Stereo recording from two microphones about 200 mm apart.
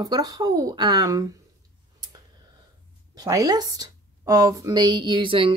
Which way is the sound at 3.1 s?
20° right (ahead or behind).